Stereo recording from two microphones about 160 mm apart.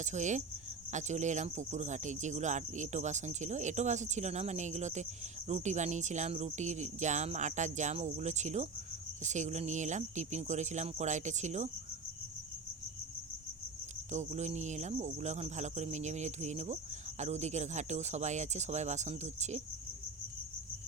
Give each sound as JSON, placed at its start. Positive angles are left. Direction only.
{"t": 0.0, "sound": "speech", "side_deg": -50}
{"t": 14.1, "sound": "speech", "side_deg": -45}